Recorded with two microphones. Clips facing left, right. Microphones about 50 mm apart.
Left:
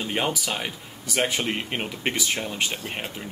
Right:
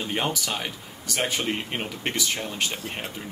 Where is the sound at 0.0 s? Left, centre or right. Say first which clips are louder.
Left 1 dB; centre.